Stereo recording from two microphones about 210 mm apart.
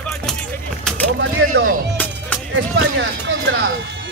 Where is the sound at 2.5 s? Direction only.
60° right (ahead or behind).